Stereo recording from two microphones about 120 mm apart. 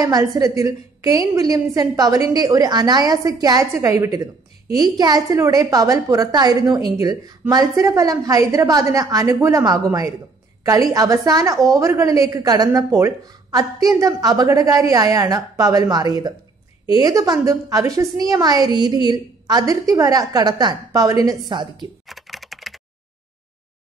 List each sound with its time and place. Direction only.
0.0 s a woman's voice: 30° right (ahead or behind)
22.0 s computer keyboard: centre (ahead or behind)